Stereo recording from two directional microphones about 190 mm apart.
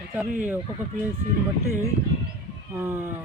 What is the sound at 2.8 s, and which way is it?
Speech, 10° right (ahead or behind).